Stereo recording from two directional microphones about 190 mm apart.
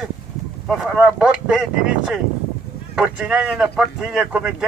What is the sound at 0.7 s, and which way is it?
Speech, centre (ahead or behind).